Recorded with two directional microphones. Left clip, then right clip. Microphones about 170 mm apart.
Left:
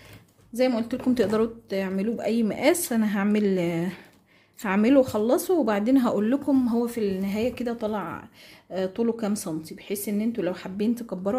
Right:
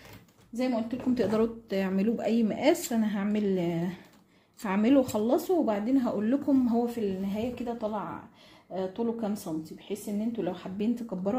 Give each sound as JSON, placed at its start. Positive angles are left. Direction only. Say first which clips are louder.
{"t": 0.5, "sound": "speech", "louder": "left 7 dB", "side_deg": 40}
{"t": 1.2, "sound": "a woman's voice", "louder": "left 2 dB", "side_deg": 20}
{"t": 5.7, "sound": "speech", "louder": "left 5 dB", "side_deg": 45}
{"t": 6.9, "sound": "speech", "louder": "left 5 dB", "side_deg": 40}